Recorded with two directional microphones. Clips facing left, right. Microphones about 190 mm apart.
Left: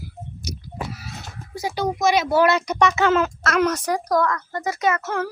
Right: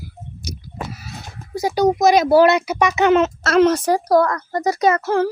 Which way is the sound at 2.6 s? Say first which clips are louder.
Right 3 dB; 10° right (ahead or behind).